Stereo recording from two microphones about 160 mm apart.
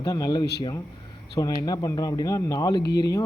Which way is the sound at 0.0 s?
25° left (ahead or behind).